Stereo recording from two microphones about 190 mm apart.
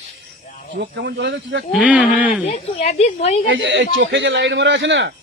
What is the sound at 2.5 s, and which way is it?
Speech, 35° left (ahead or behind).